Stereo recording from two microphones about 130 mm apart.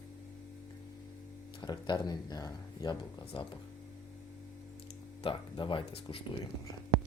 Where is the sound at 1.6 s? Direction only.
35° left (ahead or behind).